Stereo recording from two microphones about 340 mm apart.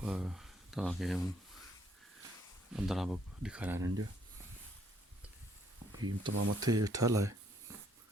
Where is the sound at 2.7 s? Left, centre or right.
Centre.